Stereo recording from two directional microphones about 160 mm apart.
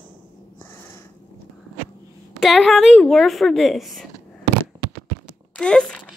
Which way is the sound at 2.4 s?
Centre (ahead or behind).